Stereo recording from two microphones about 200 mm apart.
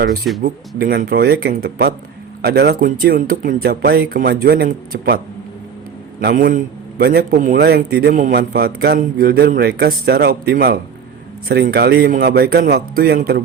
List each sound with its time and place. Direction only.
0.8 s a man's voice: 50° right (ahead or behind)